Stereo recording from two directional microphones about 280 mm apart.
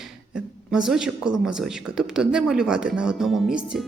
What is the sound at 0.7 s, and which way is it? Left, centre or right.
A woman's voice, centre.